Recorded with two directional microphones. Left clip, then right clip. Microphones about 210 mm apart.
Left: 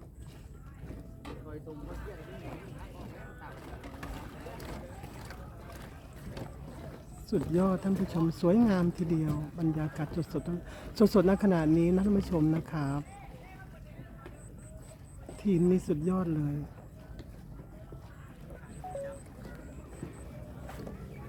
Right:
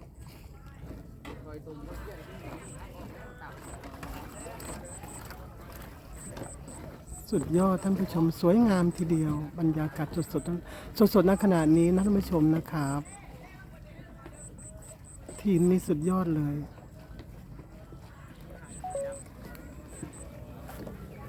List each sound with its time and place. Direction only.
1.2 s vehicle: centre (ahead or behind)
4.5 s speech: centre (ahead or behind)
5.2 s boat: 5° left (ahead or behind)
7.5 s speech: 15° right (ahead or behind)
15.3 s speech: 15° right (ahead or behind)